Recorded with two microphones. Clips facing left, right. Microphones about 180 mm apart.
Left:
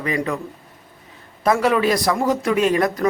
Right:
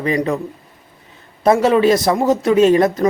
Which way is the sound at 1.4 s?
25° right (ahead or behind).